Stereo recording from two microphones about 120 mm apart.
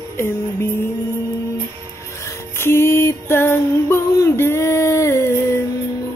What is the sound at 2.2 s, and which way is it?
Music, 20° left (ahead or behind).